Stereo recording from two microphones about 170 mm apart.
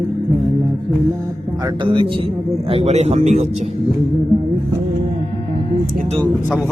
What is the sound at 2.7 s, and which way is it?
Speech, 35° right (ahead or behind).